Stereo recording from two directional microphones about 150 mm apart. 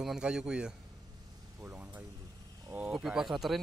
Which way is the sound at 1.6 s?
10° right (ahead or behind).